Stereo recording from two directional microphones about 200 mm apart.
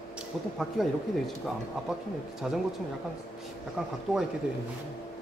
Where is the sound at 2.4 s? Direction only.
Centre (ahead or behind).